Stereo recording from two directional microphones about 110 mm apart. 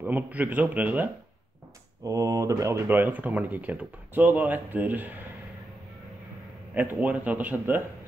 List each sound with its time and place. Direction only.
0.0 s speech: 15° right (ahead or behind)
2.0 s speech: 30° right (ahead or behind)
2.9 s speech: 15° right (ahead or behind)
6.7 s speech: 15° right (ahead or behind)